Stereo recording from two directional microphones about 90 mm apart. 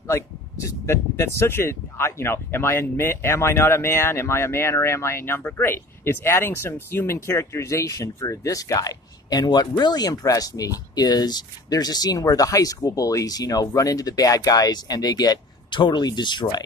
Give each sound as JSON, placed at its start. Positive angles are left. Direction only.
{"t": 0.0, "sound": "speech", "side_deg": 35}